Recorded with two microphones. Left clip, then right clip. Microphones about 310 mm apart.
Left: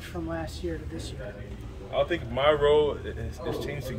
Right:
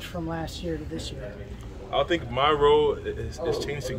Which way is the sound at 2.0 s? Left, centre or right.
Centre.